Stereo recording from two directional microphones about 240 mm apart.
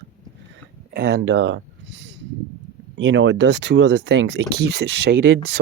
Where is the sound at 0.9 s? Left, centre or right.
Right.